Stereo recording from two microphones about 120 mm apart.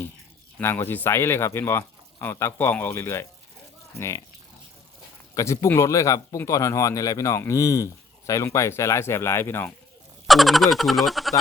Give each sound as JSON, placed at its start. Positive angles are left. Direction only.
{"t": 0.6, "sound": "speech", "side_deg": 20}
{"t": 5.3, "sound": "speech", "side_deg": 30}
{"t": 10.2, "sound": "speech", "side_deg": 0}